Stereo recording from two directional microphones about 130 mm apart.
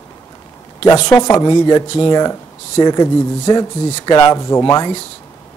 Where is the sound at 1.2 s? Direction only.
30° left (ahead or behind).